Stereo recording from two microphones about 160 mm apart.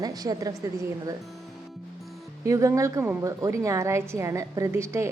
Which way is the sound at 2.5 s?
20° right (ahead or behind).